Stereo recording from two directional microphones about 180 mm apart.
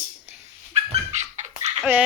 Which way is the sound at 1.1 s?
40° right (ahead or behind).